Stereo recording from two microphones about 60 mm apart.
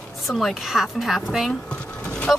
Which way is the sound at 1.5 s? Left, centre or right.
Left.